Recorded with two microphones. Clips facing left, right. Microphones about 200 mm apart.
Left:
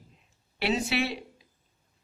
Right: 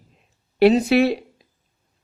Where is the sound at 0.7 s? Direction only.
60° right (ahead or behind).